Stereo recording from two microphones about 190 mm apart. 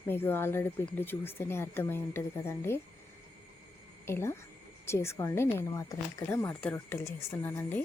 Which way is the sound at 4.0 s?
15° left (ahead or behind).